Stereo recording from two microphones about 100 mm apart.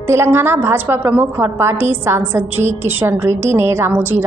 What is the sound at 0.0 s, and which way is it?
A woman's voice, 25° right (ahead or behind).